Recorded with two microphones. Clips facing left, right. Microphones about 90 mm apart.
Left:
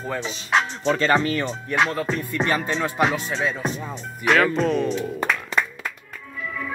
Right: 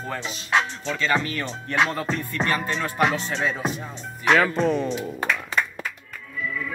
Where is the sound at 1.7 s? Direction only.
Centre (ahead or behind).